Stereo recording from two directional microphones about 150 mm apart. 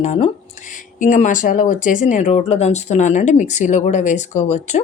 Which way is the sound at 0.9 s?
55° left (ahead or behind).